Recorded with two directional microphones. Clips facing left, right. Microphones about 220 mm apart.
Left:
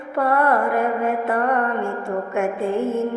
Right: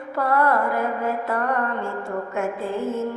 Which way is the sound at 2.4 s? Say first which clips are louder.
Left 5 dB; 25° left (ahead or behind).